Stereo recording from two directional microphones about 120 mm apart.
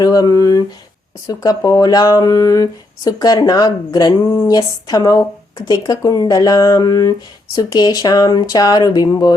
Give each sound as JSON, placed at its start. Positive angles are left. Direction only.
{"t": 0.0, "sound": "speech", "side_deg": 30}